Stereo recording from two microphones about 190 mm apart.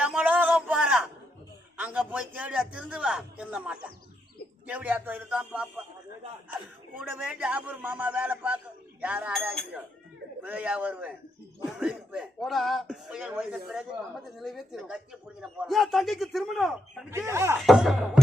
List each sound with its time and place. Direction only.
0.0 s a sound: 10° right (ahead or behind)
1.8 s a man's voice: 10° right (ahead or behind)
7.1 s a man's voice: 5° right (ahead or behind)
17.1 s a man's voice: 15° right (ahead or behind)
17.6 s speech: centre (ahead or behind)